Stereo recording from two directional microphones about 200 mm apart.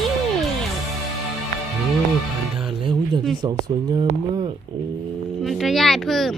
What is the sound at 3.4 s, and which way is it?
Speech, 20° right (ahead or behind).